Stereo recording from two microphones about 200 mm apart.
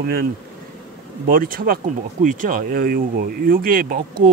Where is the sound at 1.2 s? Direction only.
45° right (ahead or behind).